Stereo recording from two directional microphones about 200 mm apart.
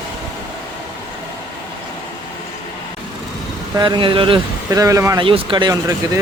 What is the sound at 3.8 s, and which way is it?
Speech, 25° right (ahead or behind).